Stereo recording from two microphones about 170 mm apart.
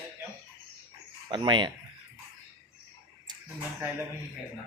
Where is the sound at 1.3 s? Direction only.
30° right (ahead or behind).